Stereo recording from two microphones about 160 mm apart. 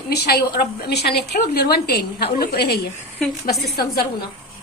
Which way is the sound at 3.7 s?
65° left (ahead or behind).